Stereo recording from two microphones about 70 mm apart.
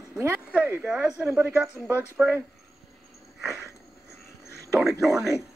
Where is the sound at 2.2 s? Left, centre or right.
Right.